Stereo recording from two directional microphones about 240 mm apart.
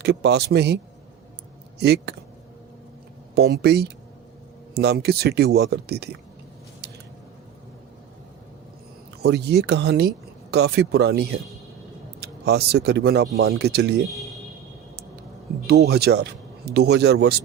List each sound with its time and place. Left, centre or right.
0.0 s speech: right
1.8 s speech: right
3.3 s speech: right
9.2 s speech: right
15.6 s speech: right